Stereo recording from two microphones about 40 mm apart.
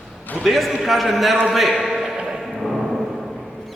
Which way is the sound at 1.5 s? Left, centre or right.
Centre.